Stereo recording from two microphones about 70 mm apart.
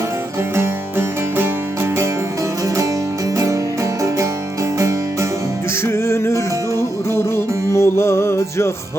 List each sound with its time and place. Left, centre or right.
0.5 s music: right
5.8 s music: left